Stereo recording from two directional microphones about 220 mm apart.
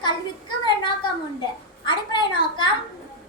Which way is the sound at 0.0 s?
20° left (ahead or behind).